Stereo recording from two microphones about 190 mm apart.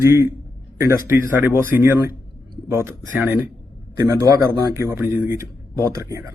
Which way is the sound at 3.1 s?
10° right (ahead or behind).